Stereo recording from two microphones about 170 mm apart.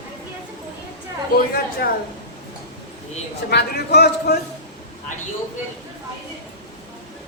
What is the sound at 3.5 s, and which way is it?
Speech, 75° left (ahead or behind).